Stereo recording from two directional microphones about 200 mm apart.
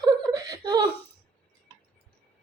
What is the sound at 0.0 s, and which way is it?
Chuckle, 20° right (ahead or behind).